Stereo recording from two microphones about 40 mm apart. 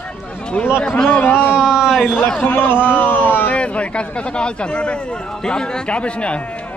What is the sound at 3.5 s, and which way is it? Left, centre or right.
Speech, left.